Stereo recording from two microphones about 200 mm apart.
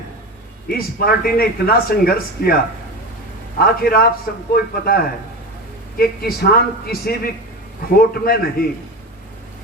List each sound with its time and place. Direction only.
0.7 s speech: 50° left (ahead or behind)
3.6 s speech: 50° left (ahead or behind)